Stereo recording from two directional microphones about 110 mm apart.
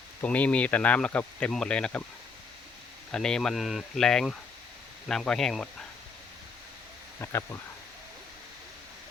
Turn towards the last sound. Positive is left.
turn(degrees=25)  # may be behind; listen again after turning